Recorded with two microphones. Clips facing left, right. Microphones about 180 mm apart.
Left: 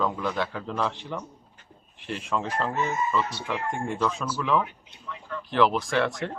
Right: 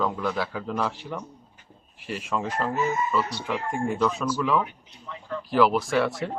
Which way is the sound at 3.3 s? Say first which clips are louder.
Right 2 dB; 15° right (ahead or behind).